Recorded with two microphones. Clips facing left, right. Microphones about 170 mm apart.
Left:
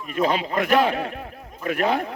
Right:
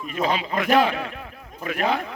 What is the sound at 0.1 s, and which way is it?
A man's voice, 50° left (ahead or behind).